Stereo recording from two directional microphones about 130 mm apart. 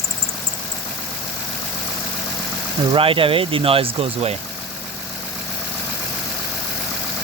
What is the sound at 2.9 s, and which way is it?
Speech, 45° right (ahead or behind).